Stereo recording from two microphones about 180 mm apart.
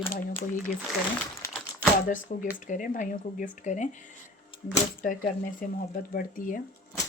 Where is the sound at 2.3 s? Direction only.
45° left (ahead or behind).